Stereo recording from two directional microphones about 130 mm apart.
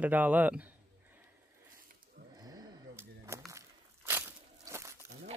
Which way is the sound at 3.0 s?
20° right (ahead or behind).